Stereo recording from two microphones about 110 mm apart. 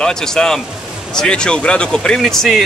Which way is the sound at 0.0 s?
5° left (ahead or behind).